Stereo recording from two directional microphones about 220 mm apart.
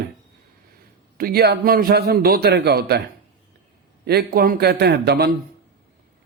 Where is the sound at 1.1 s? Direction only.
45° right (ahead or behind).